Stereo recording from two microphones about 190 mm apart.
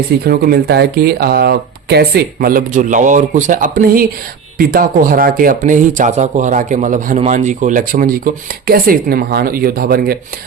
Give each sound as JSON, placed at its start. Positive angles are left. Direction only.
{"t": 0.3, "sound": "speech", "side_deg": -55}